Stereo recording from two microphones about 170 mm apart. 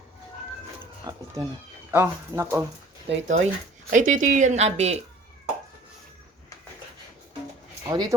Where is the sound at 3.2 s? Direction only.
45° right (ahead or behind).